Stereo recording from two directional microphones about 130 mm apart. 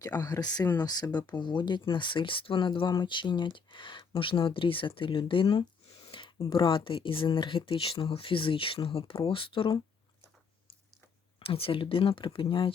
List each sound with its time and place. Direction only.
0.0 s speech: 30° left (ahead or behind)
11.3 s speech: 45° left (ahead or behind)